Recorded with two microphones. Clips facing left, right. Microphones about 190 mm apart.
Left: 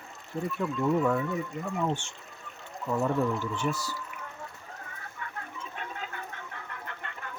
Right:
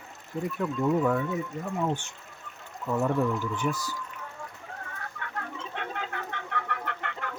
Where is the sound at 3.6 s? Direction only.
5° right (ahead or behind).